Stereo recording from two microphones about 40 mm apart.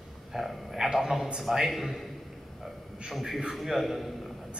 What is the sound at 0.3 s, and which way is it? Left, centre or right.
A man's voice, centre.